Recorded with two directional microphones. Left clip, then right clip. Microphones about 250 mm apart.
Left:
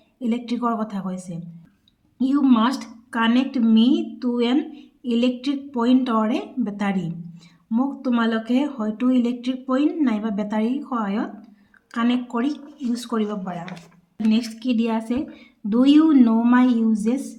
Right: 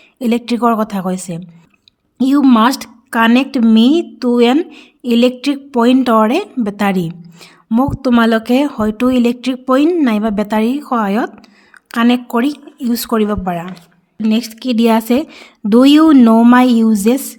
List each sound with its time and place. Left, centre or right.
0.2 s speech: right